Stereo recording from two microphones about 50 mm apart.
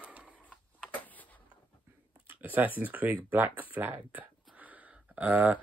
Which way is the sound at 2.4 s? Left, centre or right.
Right.